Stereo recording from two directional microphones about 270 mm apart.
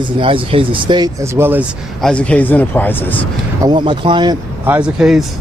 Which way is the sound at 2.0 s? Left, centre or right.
Centre.